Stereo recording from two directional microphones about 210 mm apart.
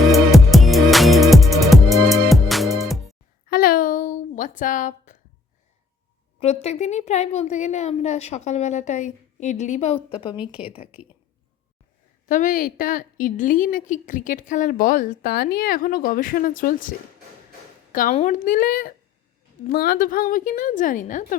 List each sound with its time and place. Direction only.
0.1 s music: centre (ahead or behind)
3.5 s a sound: 45° left (ahead or behind)
6.4 s a woman's voice: 30° left (ahead or behind)
10.3 s a woman's voice: 5° right (ahead or behind)
12.3 s a woman's voice: 40° left (ahead or behind)
17.9 s a woman's voice: 35° left (ahead or behind)